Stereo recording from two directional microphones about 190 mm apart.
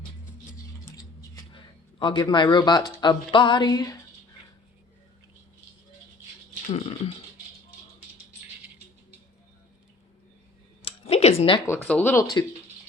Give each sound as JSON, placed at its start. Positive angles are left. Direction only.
{"t": 0.9, "sound": "speech", "side_deg": 20}
{"t": 6.7, "sound": "speech", "side_deg": 35}
{"t": 10.8, "sound": "a sound", "side_deg": 30}
{"t": 11.6, "sound": "speech", "side_deg": 10}